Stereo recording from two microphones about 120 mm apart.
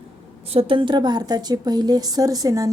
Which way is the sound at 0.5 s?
45° right (ahead or behind).